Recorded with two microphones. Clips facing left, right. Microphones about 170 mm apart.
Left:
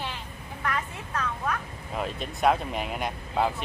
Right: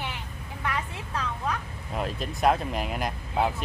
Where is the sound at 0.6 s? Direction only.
15° right (ahead or behind).